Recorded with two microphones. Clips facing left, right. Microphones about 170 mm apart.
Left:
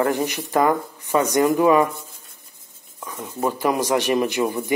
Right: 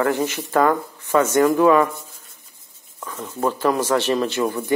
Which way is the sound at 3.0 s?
15° left (ahead or behind).